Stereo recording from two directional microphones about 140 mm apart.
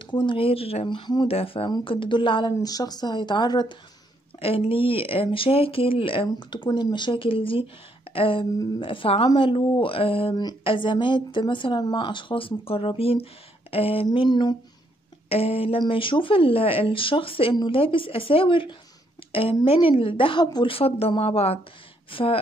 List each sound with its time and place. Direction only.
0.0 s speech: 35° left (ahead or behind)
4.4 s speech: 40° left (ahead or behind)
15.2 s speech: 45° left (ahead or behind)